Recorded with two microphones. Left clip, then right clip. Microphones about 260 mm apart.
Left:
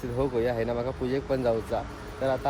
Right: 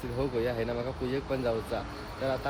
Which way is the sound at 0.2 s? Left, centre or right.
Centre.